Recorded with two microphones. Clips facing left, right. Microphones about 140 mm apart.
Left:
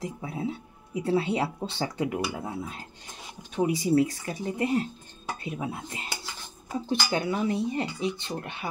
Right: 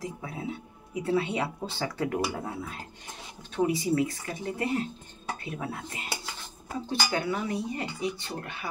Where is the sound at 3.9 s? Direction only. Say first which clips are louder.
Left 4 dB; 25° left (ahead or behind).